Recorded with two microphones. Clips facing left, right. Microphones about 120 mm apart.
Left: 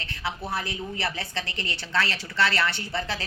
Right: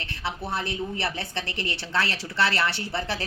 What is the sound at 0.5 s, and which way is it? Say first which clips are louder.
A woman's voice: right 2 dB; 25° right (ahead or behind).